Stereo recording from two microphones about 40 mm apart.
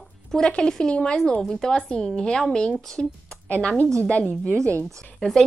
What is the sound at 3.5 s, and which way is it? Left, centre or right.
A woman's voice, left.